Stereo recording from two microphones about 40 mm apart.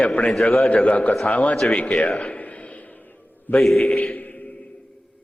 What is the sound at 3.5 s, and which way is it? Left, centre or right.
Speech, left.